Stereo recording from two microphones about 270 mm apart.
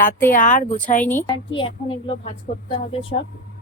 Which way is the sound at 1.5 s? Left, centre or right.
Centre.